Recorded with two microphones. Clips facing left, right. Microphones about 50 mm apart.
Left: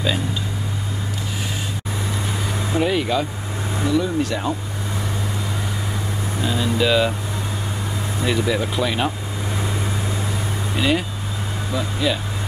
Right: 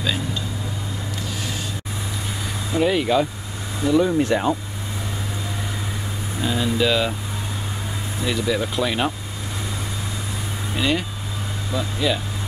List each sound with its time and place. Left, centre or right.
2.8 s speech: centre
3.9 s speech: right
6.4 s speech: centre
8.3 s speech: centre
10.8 s speech: centre